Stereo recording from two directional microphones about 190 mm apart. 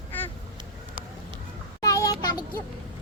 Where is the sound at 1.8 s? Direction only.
20° left (ahead or behind).